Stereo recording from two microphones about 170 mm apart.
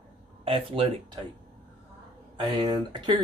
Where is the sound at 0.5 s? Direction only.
30° right (ahead or behind).